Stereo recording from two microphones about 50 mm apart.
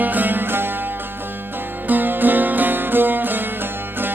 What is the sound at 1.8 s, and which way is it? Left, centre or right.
Music, right.